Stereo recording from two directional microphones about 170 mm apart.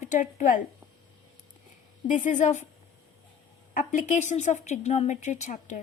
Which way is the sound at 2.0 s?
50° left (ahead or behind).